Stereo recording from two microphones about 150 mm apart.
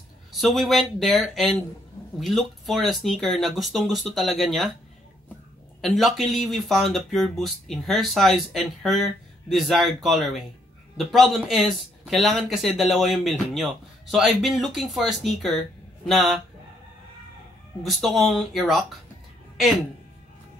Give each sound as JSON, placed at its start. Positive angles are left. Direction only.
{"t": 0.3, "sound": "speech", "side_deg": 0}
{"t": 5.8, "sound": "speech", "side_deg": 0}
{"t": 17.8, "sound": "speech", "side_deg": 0}